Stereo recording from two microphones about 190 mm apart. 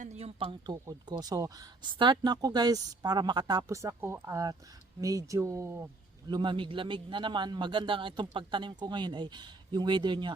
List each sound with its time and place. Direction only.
0.0 s speech: 35° right (ahead or behind)